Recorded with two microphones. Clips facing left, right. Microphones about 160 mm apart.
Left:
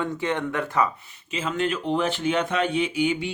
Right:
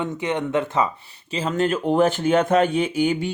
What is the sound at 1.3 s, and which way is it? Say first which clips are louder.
Speech: right 4 dB; 35° right (ahead or behind).